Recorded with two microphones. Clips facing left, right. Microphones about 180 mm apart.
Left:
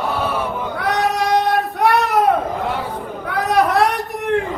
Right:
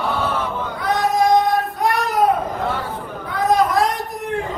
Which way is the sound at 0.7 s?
65° left (ahead or behind).